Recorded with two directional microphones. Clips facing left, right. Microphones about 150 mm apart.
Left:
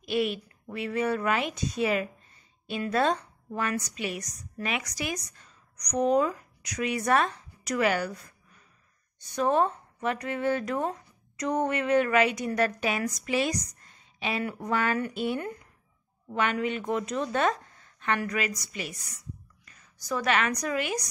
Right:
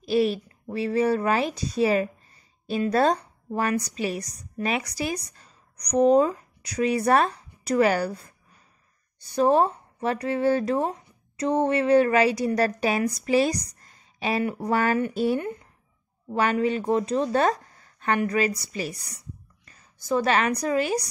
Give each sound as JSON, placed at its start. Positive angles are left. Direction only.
{"t": 0.0, "sound": "a woman's voice", "side_deg": -35}
{"t": 15.4, "sound": "a woman's voice", "side_deg": -25}